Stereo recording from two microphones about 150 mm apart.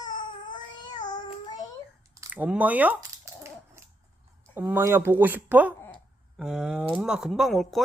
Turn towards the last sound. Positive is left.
turn(degrees=0)  # may be behind; listen again after turning